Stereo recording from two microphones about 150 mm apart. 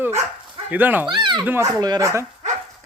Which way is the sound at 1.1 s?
30° right (ahead or behind).